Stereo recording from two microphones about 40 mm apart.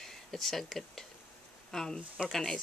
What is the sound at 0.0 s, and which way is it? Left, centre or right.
Speech, centre.